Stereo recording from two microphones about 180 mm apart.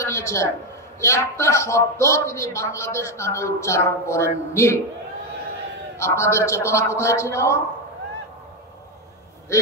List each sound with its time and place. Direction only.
0.0 s a woman's voice: 15° left (ahead or behind)
5.9 s a man's voice: 15° left (ahead or behind)